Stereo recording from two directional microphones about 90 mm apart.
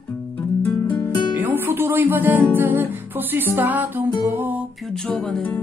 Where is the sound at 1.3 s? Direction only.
20° right (ahead or behind).